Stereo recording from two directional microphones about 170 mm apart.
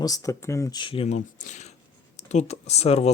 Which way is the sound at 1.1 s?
45° left (ahead or behind).